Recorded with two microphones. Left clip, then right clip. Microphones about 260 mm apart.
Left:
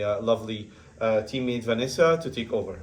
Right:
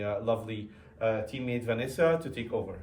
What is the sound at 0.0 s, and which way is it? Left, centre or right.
A woman's voice, centre.